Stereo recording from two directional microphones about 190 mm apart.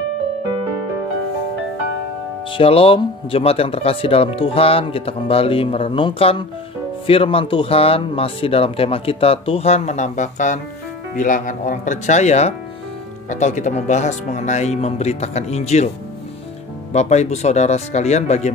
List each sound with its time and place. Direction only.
2.5 s speech: 30° left (ahead or behind)
16.9 s speech: 35° left (ahead or behind)